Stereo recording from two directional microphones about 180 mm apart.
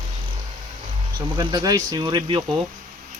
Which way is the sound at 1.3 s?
25° right (ahead or behind).